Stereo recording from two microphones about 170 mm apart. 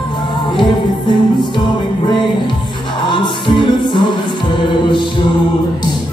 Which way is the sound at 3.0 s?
30° left (ahead or behind).